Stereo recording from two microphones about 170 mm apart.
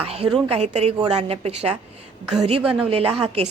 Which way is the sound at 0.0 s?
35° right (ahead or behind).